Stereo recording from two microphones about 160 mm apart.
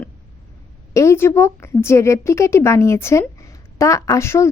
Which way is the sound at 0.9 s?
15° left (ahead or behind).